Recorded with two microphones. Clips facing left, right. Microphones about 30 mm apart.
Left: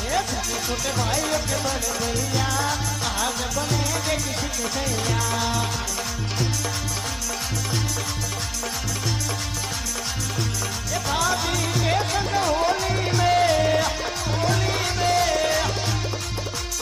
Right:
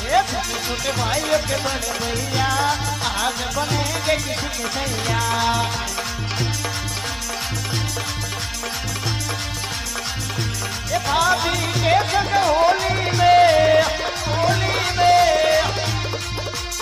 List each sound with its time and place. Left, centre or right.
0.1 s music: right
10.9 s music: right